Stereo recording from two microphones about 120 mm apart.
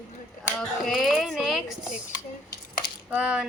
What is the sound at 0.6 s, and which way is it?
Speech, 5° left (ahead or behind).